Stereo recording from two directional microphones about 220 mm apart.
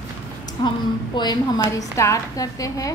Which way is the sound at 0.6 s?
20° left (ahead or behind).